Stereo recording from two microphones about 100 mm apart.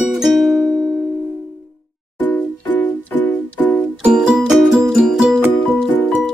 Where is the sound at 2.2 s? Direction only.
20° left (ahead or behind).